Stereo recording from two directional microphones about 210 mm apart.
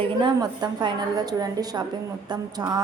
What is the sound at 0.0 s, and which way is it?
A woman's voice, 20° right (ahead or behind).